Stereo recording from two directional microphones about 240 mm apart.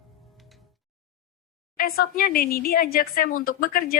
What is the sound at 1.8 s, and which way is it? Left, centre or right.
Speech, left.